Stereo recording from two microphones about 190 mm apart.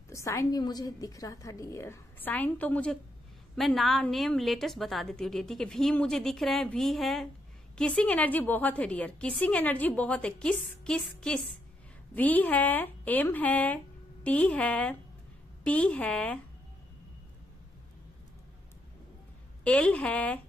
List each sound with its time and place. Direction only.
0.1 s a woman's voice: 15° left (ahead or behind)
19.6 s a woman's voice: 5° left (ahead or behind)